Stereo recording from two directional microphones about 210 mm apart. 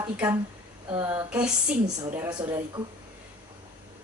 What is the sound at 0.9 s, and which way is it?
Speech, 20° right (ahead or behind).